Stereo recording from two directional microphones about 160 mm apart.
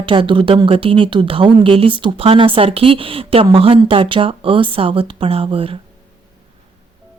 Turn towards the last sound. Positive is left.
turn(degrees=-35)  # may be behind; listen again after turning